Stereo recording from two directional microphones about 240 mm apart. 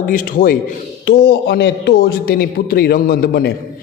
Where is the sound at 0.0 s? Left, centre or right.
Left.